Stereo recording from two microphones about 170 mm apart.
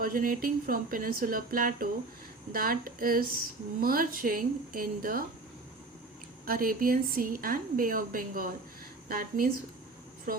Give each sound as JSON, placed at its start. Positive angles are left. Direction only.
{"t": 0.0, "sound": "a woman's voice", "side_deg": -55}
{"t": 6.4, "sound": "a woman's voice", "side_deg": -55}